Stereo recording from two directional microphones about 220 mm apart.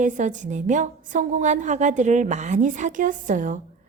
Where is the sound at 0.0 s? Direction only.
35° right (ahead or behind).